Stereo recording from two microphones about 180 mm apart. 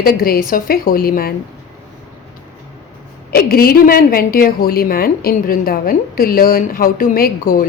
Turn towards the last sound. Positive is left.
turn(degrees=50)  # may be behind; listen again after turning